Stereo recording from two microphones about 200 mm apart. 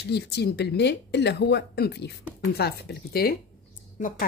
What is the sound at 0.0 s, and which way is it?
Speech, 55° left (ahead or behind).